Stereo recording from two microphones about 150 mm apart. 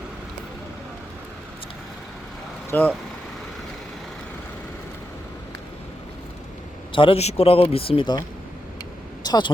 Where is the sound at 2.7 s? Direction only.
10° left (ahead or behind).